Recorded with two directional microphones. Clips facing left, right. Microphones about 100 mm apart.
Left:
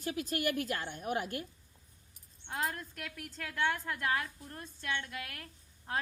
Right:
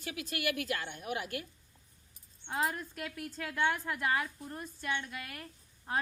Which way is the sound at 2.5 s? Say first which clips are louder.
Right 3 dB; 10° right (ahead or behind).